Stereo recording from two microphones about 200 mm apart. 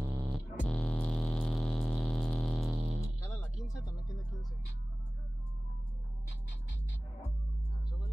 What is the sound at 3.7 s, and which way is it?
Music, 15° left (ahead or behind).